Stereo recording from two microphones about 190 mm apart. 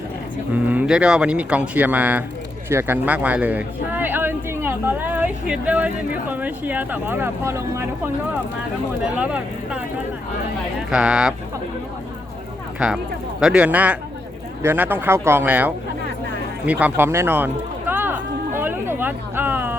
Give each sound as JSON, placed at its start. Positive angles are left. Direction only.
{"t": 0.5, "sound": "speech", "side_deg": -10}
{"t": 9.1, "sound": "speech", "side_deg": -5}
{"t": 10.9, "sound": "speech", "side_deg": -5}
{"t": 12.8, "sound": "speech", "side_deg": -5}
{"t": 18.6, "sound": "a sound", "side_deg": -10}